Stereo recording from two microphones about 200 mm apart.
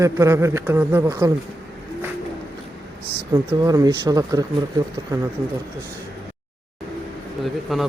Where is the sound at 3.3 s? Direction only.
20° right (ahead or behind).